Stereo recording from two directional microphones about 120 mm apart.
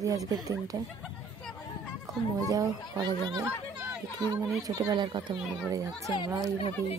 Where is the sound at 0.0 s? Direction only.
30° right (ahead or behind).